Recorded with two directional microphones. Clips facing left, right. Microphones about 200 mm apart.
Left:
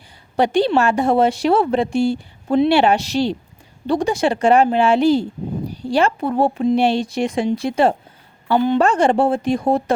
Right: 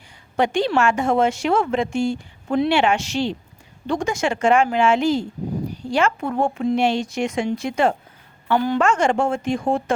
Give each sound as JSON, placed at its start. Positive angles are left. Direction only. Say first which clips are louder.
{"t": 0.3, "sound": "a woman's voice", "louder": "left 3 dB", "side_deg": 35}
{"t": 8.5, "sound": "a woman's voice", "louder": "left 4 dB", "side_deg": 20}
{"t": 8.8, "sound": "a woman's voice", "louder": "left 3 dB", "side_deg": 35}